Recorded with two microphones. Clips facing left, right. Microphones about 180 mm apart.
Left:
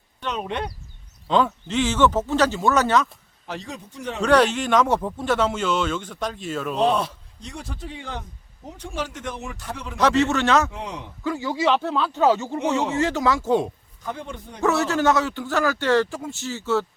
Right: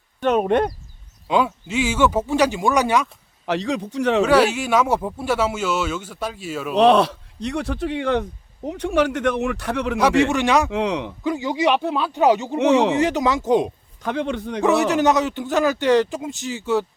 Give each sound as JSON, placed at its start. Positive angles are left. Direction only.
{"t": 0.2, "sound": "speech", "side_deg": -50}
{"t": 1.3, "sound": "speech", "side_deg": -10}
{"t": 3.4, "sound": "speech", "side_deg": -85}
{"t": 4.2, "sound": "speech", "side_deg": -5}
{"t": 6.7, "sound": "speech", "side_deg": -80}
{"t": 10.0, "sound": "speech", "side_deg": -10}
{"t": 10.7, "sound": "speech", "side_deg": -80}
{"t": 11.2, "sound": "speech", "side_deg": -20}
{"t": 14.0, "sound": "speech", "side_deg": -80}
{"t": 14.6, "sound": "speech", "side_deg": -15}